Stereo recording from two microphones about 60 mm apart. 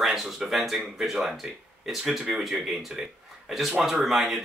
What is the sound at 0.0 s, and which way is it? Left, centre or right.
Speech, centre.